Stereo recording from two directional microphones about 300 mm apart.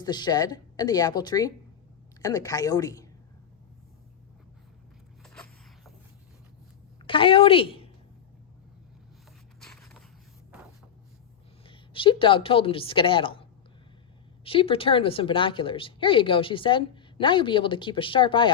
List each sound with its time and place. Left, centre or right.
0.0 s a woman's voice: centre
5.2 s zipper: centre
7.1 s a woman's voice: centre
9.6 s a sound: centre
11.6 s a woman's voice: centre
14.4 s a woman's voice: centre